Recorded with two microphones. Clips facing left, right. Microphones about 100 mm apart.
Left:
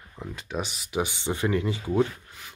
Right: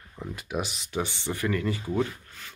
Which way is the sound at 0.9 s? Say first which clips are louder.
Left 5 dB; 15° left (ahead or behind).